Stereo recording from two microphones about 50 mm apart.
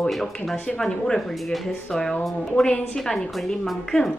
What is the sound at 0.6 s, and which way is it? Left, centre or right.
Speech, centre.